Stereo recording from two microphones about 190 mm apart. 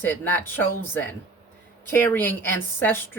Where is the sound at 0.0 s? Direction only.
10° left (ahead or behind).